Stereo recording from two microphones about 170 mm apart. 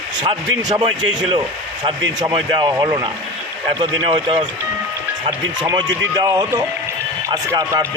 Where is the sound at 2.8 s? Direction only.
25° right (ahead or behind).